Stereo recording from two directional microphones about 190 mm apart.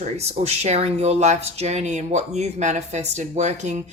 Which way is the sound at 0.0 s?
35° right (ahead or behind).